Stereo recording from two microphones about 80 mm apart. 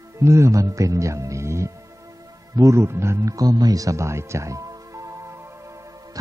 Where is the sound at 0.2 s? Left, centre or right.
Right.